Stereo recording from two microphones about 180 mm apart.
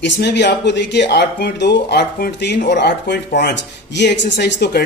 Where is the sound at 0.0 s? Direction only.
70° left (ahead or behind).